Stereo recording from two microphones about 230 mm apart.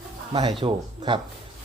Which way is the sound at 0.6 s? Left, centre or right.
Right.